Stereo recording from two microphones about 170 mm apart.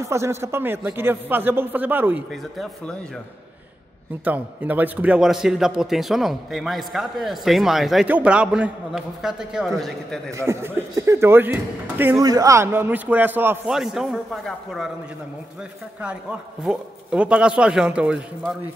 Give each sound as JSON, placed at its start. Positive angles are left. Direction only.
{"t": 0.0, "sound": "speech", "side_deg": -15}
{"t": 4.2, "sound": "a man's voice", "side_deg": -10}
{"t": 10.3, "sound": "a man's voice", "side_deg": -15}
{"t": 16.0, "sound": "a man's voice", "side_deg": -5}